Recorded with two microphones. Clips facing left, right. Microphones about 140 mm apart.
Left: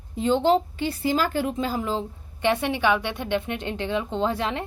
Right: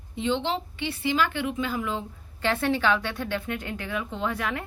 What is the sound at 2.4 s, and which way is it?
A woman's voice, 15° left (ahead or behind).